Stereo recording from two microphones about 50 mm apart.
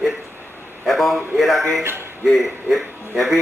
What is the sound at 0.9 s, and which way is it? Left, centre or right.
A man's voice, centre.